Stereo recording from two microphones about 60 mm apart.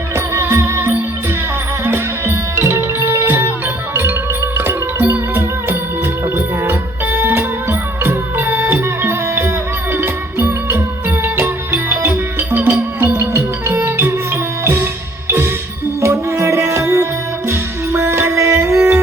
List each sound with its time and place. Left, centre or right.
0.3 s music: right
4.5 s music: right
16.0 s music: right
17.5 s music: right